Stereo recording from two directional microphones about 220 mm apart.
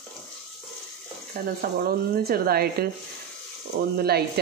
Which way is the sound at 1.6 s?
45° right (ahead or behind).